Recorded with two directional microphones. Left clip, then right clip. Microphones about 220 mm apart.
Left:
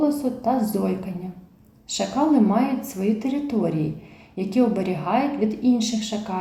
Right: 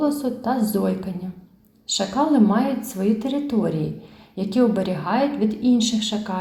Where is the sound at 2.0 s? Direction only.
25° right (ahead or behind).